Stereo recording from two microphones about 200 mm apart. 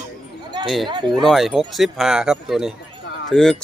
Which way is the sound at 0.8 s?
25° right (ahead or behind).